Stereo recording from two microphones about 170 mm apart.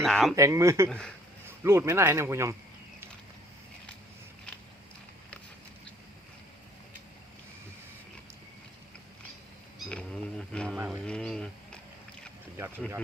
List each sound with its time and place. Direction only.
0.0 s speech: centre (ahead or behind)
0.3 s speech: 15° right (ahead or behind)
0.9 s speech: 5° left (ahead or behind)
1.6 s speech: 15° right (ahead or behind)
9.7 s speech: 5° left (ahead or behind)
10.8 s speech: 15° right (ahead or behind)
11.0 s speech: 5° left (ahead or behind)
12.5 s speech: 15° right (ahead or behind)